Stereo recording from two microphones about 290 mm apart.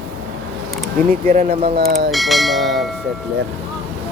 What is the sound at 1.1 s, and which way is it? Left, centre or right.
Speech, right.